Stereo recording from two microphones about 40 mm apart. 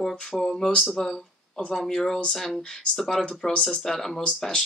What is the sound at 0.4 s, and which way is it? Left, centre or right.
Speech, centre.